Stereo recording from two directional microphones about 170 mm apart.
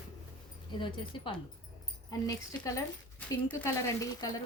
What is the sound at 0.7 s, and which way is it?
Speech, 30° left (ahead or behind).